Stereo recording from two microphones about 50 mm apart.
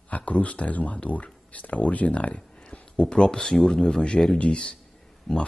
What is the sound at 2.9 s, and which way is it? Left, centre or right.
Speech, centre.